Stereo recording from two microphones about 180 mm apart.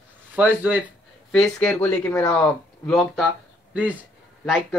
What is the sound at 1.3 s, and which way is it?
Speech, 5° left (ahead or behind).